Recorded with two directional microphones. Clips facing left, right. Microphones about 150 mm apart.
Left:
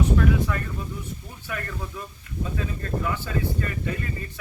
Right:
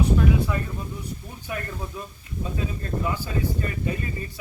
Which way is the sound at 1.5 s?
20° right (ahead or behind).